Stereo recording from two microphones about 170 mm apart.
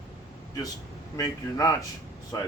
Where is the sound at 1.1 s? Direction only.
20° left (ahead or behind).